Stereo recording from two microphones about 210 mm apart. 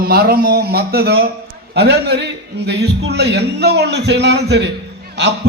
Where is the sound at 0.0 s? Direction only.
45° right (ahead or behind).